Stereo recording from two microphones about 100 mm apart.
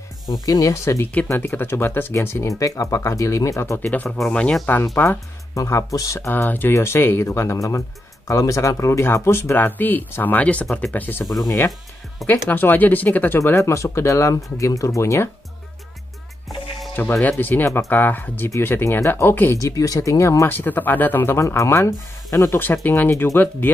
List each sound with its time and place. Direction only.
0.3 s speech: 35° left (ahead or behind); by 4.6 s 10° left (ahead or behind)
4.9 s speech: 20° left (ahead or behind)
5.6 s speech: 35° left (ahead or behind)
12.3 s speech: 20° left (ahead or behind)
13.4 s speech: 30° left (ahead or behind)
16.9 s speech: 20° left (ahead or behind)
22.6 s speech: 20° left (ahead or behind)